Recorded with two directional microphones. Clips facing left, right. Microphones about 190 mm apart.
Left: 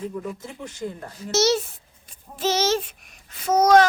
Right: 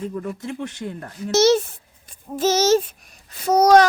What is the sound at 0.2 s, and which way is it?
Speech, 65° right (ahead or behind).